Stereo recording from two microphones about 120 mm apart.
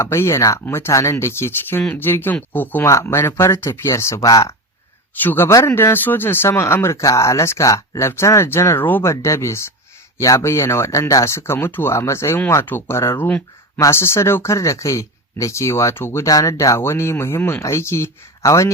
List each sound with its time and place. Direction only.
0.0 s speech: 20° left (ahead or behind)
5.1 s speech: 15° left (ahead or behind)